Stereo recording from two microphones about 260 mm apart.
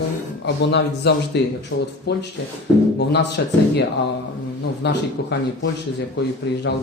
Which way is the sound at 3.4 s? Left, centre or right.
Left.